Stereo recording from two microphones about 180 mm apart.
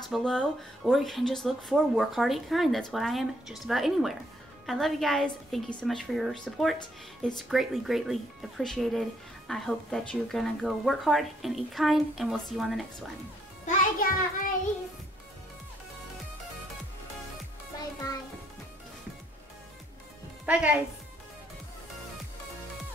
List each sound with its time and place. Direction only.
0.1 s speech: 5° left (ahead or behind)
13.7 s a child's voice: 50° left (ahead or behind)
20.4 s speech: 5° right (ahead or behind)